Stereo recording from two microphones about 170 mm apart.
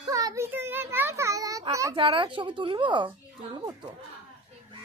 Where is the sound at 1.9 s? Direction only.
30° right (ahead or behind).